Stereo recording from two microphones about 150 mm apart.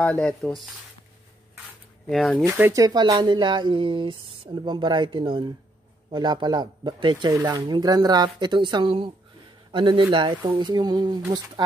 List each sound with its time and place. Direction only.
0.0 s speech: 5° left (ahead or behind)
2.0 s speech: centre (ahead or behind)
2.6 s a man's voice: 20° right (ahead or behind)